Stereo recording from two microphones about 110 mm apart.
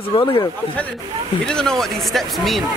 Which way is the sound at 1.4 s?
5° left (ahead or behind).